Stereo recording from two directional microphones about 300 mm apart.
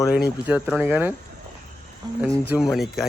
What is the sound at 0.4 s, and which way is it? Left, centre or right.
Speech, centre.